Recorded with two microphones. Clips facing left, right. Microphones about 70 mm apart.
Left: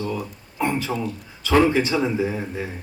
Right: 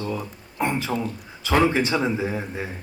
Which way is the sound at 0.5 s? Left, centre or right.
Right.